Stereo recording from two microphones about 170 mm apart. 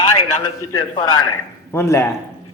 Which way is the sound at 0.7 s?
25° left (ahead or behind).